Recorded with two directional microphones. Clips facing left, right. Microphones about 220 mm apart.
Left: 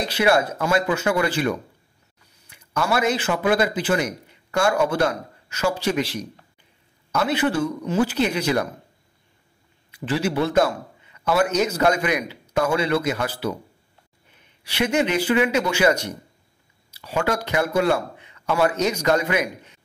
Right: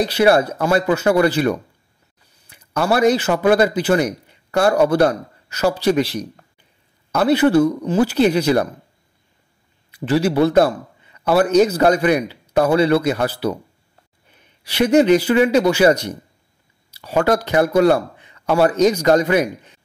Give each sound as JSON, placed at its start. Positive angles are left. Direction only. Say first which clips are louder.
{"t": 0.0, "sound": "a man's voice", "louder": "right 5 dB", "side_deg": -35}
{"t": 9.8, "sound": "a man's voice", "louder": "right 6 dB", "side_deg": -40}
{"t": 14.6, "sound": "a man's voice", "louder": "right 8 dB", "side_deg": -35}